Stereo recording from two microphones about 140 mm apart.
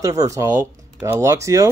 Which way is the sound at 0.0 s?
25° right (ahead or behind).